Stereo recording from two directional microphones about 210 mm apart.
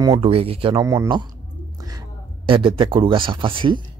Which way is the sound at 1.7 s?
15° right (ahead or behind).